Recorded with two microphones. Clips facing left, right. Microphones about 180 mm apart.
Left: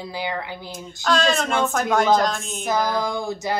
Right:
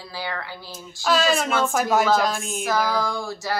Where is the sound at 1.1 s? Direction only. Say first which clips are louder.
Even; 5° right (ahead or behind).